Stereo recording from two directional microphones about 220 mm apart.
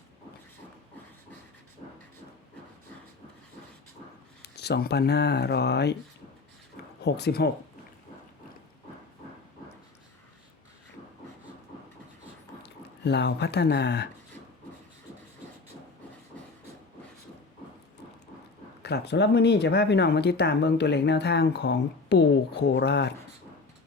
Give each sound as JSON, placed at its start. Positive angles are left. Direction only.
{"t": 4.4, "sound": "speech", "side_deg": 50}
{"t": 7.0, "sound": "speech", "side_deg": 50}
{"t": 12.6, "sound": "speech", "side_deg": 50}
{"t": 18.8, "sound": "speech", "side_deg": 50}